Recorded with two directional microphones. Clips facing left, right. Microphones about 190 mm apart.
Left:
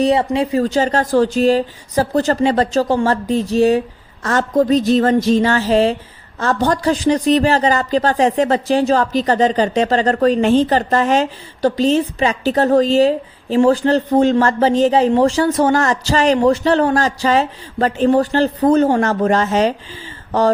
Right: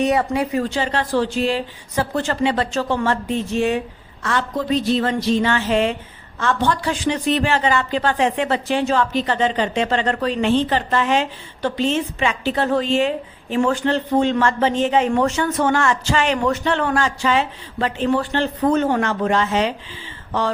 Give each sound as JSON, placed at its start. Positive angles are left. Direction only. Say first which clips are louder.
{"t": 0.0, "sound": "speech", "louder": "left 4 dB", "side_deg": 30}
{"t": 0.6, "sound": "speech", "louder": "left 6 dB", "side_deg": 40}